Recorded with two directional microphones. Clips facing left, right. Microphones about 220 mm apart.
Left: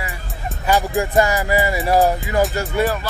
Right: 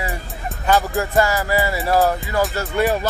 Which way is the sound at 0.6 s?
15° left (ahead or behind).